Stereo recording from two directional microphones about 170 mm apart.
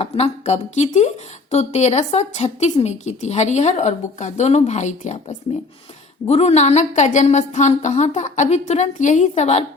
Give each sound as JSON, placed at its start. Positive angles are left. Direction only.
{"t": 0.0, "sound": "speech", "side_deg": 40}
{"t": 6.2, "sound": "a woman's voice", "side_deg": 40}